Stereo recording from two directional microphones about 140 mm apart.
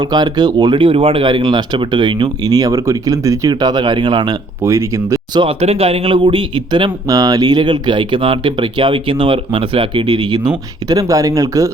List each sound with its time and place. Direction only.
0.0 s speech: 30° right (ahead or behind)
4.6 s speech: 20° right (ahead or behind)
5.4 s speech: 45° right (ahead or behind); by 11.7 s 25° right (ahead or behind)